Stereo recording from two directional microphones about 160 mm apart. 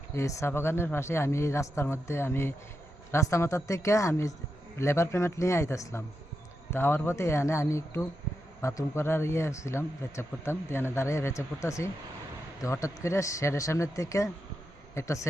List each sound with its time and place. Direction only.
0.1 s speech: 20° left (ahead or behind)